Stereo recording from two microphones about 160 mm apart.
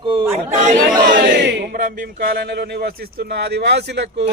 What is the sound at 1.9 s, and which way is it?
Speech, 75° right (ahead or behind).